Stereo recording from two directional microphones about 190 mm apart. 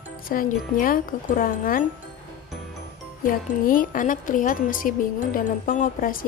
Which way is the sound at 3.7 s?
45° left (ahead or behind).